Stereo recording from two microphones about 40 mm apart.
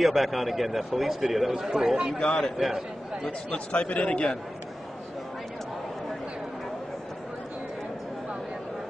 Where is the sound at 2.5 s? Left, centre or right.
Centre.